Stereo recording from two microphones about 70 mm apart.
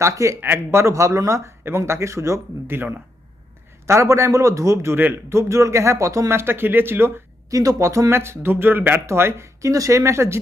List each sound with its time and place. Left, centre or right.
0.0 s a man's voice: right
0.3 s a man's voice: right
3.8 s a man's voice: right
7.5 s speech: right
9.0 s a man's voice: right